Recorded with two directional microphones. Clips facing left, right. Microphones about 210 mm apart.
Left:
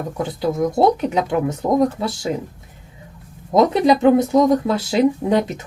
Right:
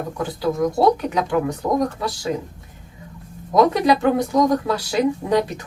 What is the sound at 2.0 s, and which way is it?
Speech, 25° left (ahead or behind).